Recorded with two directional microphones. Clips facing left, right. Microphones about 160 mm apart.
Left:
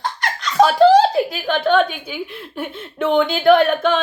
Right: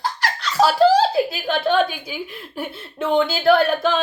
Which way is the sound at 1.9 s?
5° right (ahead or behind).